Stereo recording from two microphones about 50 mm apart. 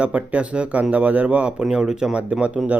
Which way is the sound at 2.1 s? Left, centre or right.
Right.